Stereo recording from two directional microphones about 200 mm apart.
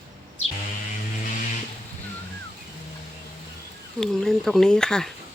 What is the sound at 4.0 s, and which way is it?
Speech, 5° left (ahead or behind).